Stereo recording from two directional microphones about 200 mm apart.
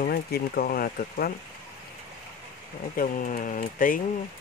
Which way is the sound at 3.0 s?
45° left (ahead or behind).